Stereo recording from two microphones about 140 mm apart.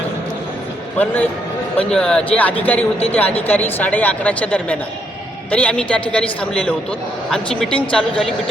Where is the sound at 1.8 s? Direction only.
5° left (ahead or behind).